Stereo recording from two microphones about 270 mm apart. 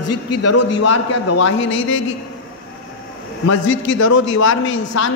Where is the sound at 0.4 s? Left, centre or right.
Left.